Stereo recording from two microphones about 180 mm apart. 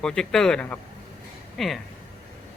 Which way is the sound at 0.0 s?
5° left (ahead or behind).